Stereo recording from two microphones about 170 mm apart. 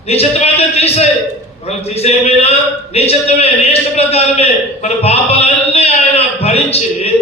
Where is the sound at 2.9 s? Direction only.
35° left (ahead or behind).